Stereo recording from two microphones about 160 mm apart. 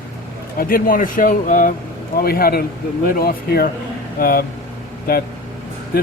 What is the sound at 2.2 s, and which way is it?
A man's voice, 70° left (ahead or behind).